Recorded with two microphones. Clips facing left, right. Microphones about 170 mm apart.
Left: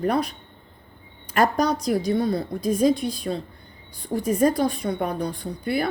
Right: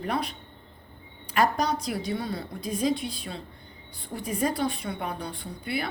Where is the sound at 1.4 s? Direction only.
45° left (ahead or behind).